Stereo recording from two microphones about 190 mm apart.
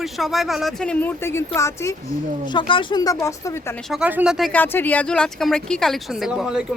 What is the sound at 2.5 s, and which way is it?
Speech, 25° left (ahead or behind).